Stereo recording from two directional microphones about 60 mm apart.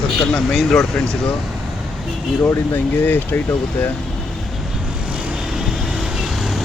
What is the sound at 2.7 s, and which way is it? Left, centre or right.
Speech, left.